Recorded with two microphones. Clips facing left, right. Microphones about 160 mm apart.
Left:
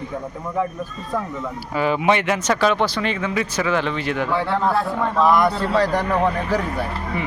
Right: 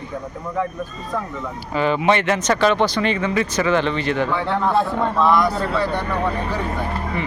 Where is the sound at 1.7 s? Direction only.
5° left (ahead or behind).